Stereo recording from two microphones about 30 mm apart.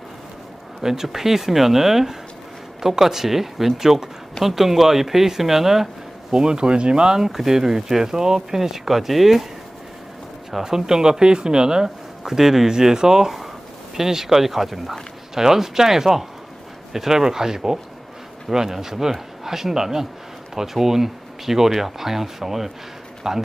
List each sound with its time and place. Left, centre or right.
0.8 s speech: centre
6.3 s speech: right
7.2 s speech: centre
10.5 s speech: centre